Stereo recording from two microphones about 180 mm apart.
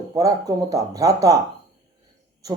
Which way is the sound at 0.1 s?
20° right (ahead or behind).